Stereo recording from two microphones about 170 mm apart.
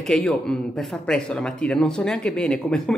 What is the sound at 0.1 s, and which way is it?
Speech, 5° left (ahead or behind).